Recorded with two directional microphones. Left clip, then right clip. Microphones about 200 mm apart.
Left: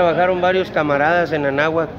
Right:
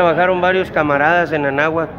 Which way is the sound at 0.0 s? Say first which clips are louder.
Right 2 dB; centre (ahead or behind).